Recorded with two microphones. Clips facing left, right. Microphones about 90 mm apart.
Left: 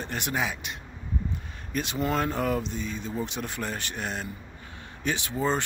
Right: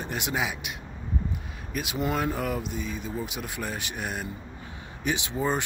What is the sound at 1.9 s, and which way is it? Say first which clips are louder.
Speech: even; 15° right (ahead or behind).